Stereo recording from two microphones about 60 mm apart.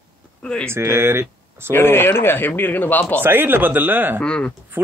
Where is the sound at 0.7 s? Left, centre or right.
Right.